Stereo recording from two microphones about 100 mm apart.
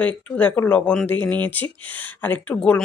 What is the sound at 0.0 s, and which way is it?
Speech, 15° left (ahead or behind).